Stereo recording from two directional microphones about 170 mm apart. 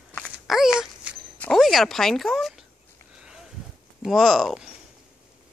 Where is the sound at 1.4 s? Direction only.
Centre (ahead or behind).